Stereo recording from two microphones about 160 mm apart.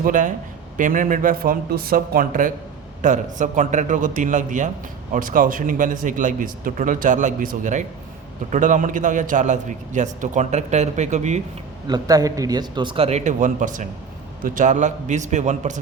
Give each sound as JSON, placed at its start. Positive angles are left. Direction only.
{"t": 0.0, "sound": "a man's voice", "side_deg": -55}
{"t": 11.9, "sound": "a man's voice", "side_deg": -25}